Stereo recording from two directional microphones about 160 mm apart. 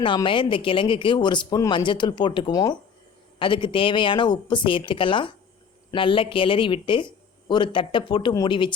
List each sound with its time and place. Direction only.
0.0 s speech: 30° left (ahead or behind)